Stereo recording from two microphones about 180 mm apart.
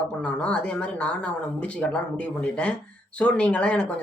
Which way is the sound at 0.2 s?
5° left (ahead or behind).